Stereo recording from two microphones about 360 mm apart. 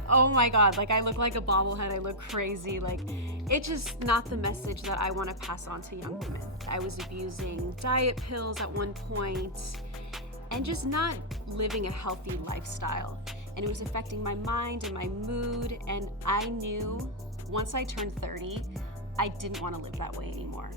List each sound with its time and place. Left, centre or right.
0.1 s speech: right
9.1 s speech: right
10.5 s speech: right